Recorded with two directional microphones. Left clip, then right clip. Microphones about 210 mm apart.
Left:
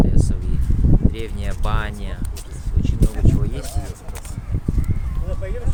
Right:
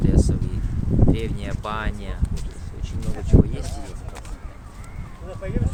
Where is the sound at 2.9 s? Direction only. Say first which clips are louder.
Left 6 dB; 40° left (ahead or behind).